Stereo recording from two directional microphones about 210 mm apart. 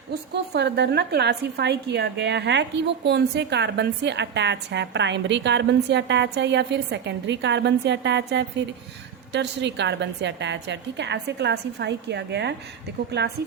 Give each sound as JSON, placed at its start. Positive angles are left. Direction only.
{"t": 0.1, "sound": "a woman's voice", "side_deg": -50}